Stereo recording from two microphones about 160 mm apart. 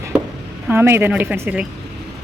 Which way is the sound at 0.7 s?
15° right (ahead or behind).